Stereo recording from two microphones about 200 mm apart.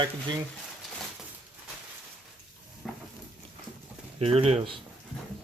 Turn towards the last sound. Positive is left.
turn(degrees=-30)  # may be behind; listen again after turning